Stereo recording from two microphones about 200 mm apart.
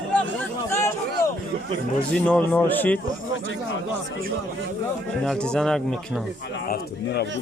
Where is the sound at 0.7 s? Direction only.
15° left (ahead or behind).